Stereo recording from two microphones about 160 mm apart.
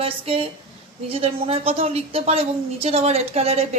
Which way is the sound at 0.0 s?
35° right (ahead or behind).